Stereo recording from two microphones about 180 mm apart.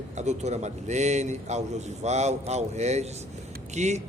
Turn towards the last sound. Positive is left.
turn(degrees=-40)  # may be behind; listen again after turning